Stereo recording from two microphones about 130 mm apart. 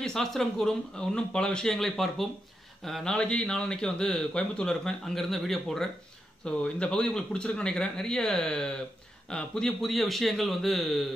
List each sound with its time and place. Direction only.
0.0 s a man's voice: 5° left (ahead or behind)